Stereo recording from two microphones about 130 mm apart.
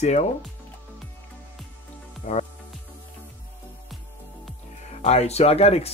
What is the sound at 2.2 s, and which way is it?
Speech, 70° left (ahead or behind).